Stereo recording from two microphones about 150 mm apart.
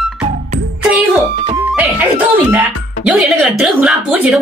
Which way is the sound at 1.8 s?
10° right (ahead or behind).